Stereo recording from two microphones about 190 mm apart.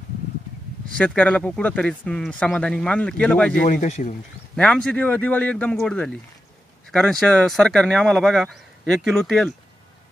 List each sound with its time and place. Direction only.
0.9 s speech: 5° left (ahead or behind)
3.6 s speech: 40° left (ahead or behind)
4.6 s speech: 5° left (ahead or behind)